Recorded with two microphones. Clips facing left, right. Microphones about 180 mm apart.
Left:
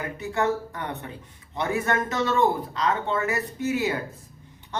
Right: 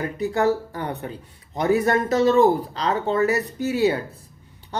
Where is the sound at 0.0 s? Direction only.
35° right (ahead or behind).